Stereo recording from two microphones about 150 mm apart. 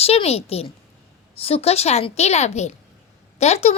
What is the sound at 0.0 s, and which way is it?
A woman's voice, 40° left (ahead or behind).